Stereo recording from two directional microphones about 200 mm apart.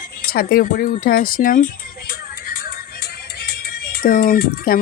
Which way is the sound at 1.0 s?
45° left (ahead or behind).